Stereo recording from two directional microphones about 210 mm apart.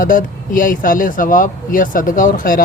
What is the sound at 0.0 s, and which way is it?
Speech, 40° left (ahead or behind).